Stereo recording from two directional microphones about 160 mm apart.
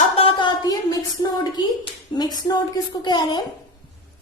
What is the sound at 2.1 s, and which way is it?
A woman's voice, 25° left (ahead or behind).